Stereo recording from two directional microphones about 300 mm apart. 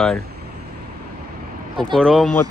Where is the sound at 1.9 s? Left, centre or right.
Centre.